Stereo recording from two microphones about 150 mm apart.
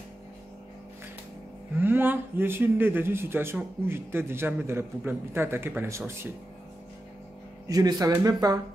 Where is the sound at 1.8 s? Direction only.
15° right (ahead or behind).